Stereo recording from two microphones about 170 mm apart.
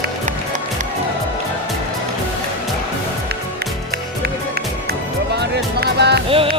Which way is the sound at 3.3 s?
70° right (ahead or behind).